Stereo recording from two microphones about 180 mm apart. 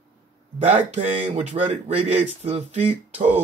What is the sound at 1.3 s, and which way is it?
Speech, 35° right (ahead or behind).